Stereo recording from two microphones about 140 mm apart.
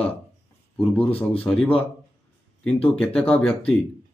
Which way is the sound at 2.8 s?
10° left (ahead or behind).